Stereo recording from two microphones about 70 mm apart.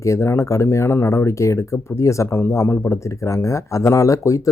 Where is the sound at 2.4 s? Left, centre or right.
Left.